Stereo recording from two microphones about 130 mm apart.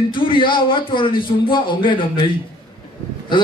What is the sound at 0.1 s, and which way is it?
A man's voice, 40° left (ahead or behind).